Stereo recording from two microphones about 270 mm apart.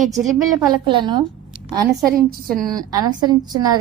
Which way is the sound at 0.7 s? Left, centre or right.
Centre.